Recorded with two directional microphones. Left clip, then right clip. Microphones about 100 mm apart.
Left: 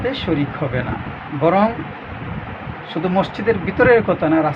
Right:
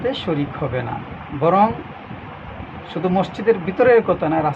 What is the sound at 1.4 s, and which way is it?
Speech, 15° right (ahead or behind).